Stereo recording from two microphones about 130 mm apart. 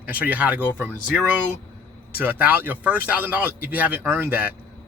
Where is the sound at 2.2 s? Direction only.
15° right (ahead or behind).